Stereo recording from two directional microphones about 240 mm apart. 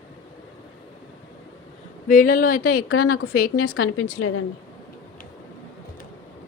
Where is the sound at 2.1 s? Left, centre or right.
Left.